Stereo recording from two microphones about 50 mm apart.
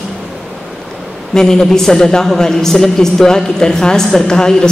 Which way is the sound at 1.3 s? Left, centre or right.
Centre.